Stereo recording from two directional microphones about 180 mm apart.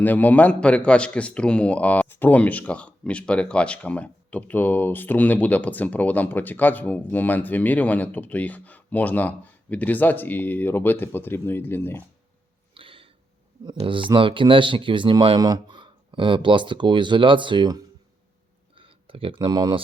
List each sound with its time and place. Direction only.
0.0 s a man's voice: 10° left (ahead or behind)
12.7 s a sound: 30° right (ahead or behind)
13.7 s speech: 30° right (ahead or behind)